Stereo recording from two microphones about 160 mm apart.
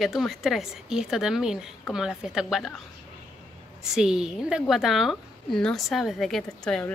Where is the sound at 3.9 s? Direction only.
5° right (ahead or behind).